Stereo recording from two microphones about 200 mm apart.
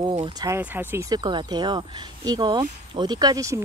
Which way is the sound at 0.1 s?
25° right (ahead or behind).